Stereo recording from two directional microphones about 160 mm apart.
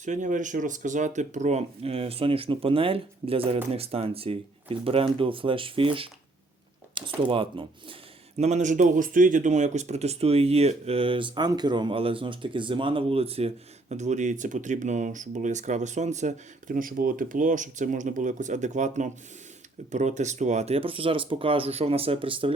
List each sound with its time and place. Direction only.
0.0 s speech: 50° right (ahead or behind); by 6.1 s 35° right (ahead or behind)
7.2 s speech: 35° right (ahead or behind)
8.4 s speech: 45° right (ahead or behind)